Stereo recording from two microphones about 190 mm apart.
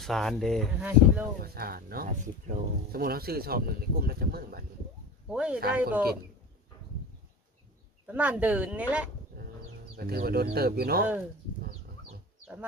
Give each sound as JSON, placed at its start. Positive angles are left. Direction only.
{"t": 0.0, "sound": "speech", "side_deg": 0}
{"t": 0.9, "sound": "speech", "side_deg": -10}
{"t": 1.4, "sound": "speech", "side_deg": -55}
{"t": 5.3, "sound": "speech", "side_deg": -5}
{"t": 8.0, "sound": "speech", "side_deg": -5}
{"t": 10.0, "sound": "speech", "side_deg": -55}